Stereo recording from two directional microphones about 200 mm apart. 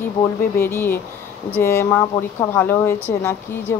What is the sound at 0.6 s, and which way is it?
A woman's voice, 10° left (ahead or behind).